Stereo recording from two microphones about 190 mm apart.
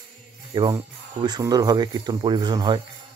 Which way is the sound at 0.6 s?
20° right (ahead or behind).